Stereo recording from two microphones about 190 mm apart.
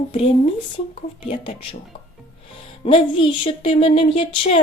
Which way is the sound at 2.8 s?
30° left (ahead or behind).